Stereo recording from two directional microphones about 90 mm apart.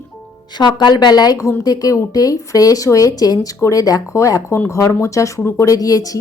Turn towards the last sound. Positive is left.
turn(degrees=40)  # may be behind; listen again after turning